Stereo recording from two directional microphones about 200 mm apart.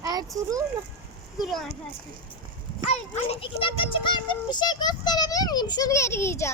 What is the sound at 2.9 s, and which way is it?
A child's voice, 30° left (ahead or behind).